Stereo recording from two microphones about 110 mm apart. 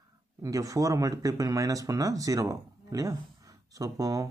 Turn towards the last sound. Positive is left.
turn(degrees=-35)  # may be behind; listen again after turning